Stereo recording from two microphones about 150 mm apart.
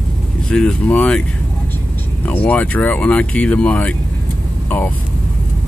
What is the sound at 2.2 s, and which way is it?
Speech, 10° left (ahead or behind).